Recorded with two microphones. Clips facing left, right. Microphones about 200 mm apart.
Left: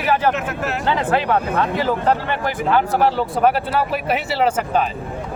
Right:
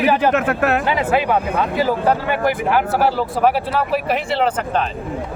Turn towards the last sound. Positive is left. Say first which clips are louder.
# even
turn(degrees=5)  # may be behind; listen again after turning